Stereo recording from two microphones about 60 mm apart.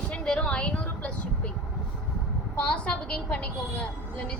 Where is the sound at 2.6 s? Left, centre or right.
Centre.